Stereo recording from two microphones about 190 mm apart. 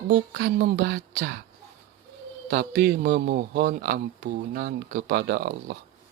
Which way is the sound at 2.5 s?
55° right (ahead or behind).